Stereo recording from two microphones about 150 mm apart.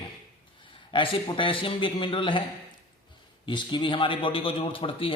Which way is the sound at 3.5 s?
30° left (ahead or behind).